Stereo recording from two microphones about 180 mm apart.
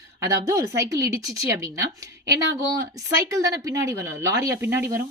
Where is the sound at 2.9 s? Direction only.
20° right (ahead or behind).